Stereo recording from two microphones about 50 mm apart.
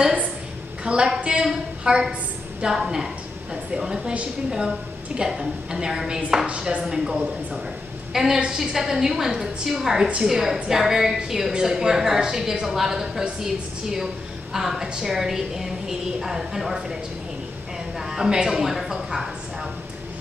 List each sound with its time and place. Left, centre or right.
0.8 s a woman's voice: centre
17.9 s speech: centre